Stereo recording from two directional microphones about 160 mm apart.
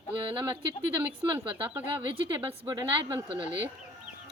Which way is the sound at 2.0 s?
30° right (ahead or behind).